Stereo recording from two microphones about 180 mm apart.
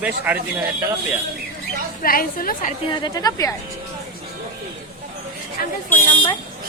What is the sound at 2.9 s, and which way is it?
Speech, 25° left (ahead or behind).